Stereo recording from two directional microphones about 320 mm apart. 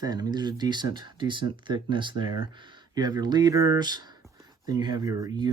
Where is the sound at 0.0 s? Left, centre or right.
Centre.